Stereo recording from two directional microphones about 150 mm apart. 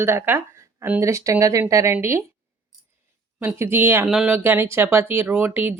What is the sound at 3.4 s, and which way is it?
Speech, 15° right (ahead or behind).